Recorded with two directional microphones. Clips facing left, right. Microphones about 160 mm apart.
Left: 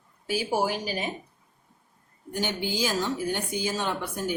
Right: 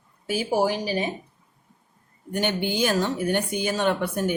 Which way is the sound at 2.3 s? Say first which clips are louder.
Right 4 dB; 60° right (ahead or behind).